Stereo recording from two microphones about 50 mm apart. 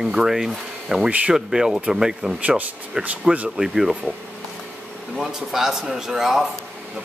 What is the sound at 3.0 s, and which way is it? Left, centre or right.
Speech, centre.